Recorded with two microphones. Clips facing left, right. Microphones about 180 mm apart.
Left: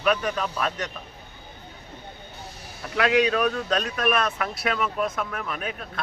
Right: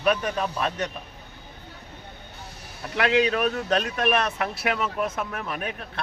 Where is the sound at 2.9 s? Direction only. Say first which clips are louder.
Left 1 dB; 25° right (ahead or behind).